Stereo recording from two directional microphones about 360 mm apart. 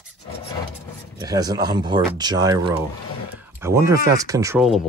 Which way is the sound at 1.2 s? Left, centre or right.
Centre.